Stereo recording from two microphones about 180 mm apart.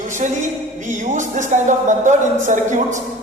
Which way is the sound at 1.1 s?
40° right (ahead or behind).